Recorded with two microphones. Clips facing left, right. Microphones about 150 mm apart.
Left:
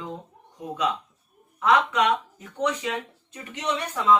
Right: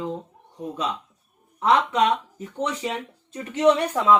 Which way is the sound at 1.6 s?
30° right (ahead or behind).